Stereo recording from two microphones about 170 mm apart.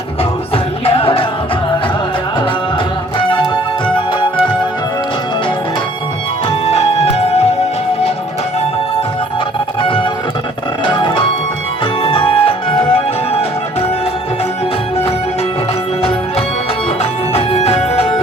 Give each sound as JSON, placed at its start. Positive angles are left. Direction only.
{"t": 0.2, "sound": "music", "side_deg": 35}
{"t": 3.2, "sound": "music", "side_deg": 30}
{"t": 6.7, "sound": "music", "side_deg": 35}
{"t": 9.8, "sound": "music", "side_deg": 30}
{"t": 17.0, "sound": "music", "side_deg": 35}